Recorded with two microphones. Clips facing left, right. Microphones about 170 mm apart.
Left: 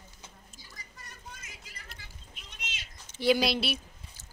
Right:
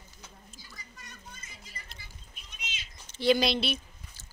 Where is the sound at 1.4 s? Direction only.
90° left.